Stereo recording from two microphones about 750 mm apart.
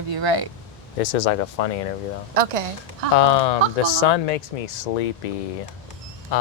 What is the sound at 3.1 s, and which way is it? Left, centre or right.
Speech, left.